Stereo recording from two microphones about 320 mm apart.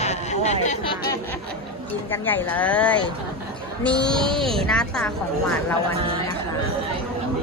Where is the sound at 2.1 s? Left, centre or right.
Centre.